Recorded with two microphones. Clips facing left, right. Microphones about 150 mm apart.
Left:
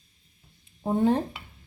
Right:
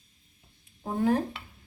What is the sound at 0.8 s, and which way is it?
Speech, 25° left (ahead or behind).